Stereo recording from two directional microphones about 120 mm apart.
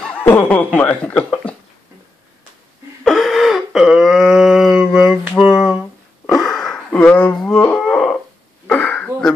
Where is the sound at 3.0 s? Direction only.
Centre (ahead or behind).